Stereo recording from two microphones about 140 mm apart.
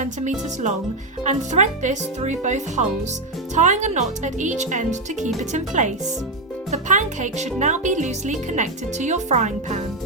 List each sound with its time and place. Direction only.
0.0 s speech: 55° right (ahead or behind)